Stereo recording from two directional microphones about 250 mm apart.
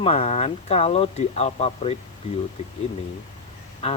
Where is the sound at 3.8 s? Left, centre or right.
Left.